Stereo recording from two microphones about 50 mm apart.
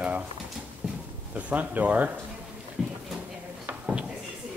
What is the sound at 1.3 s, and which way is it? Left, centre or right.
Speech, right.